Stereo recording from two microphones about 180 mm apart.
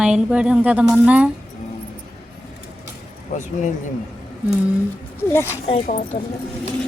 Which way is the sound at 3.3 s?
45° left (ahead or behind).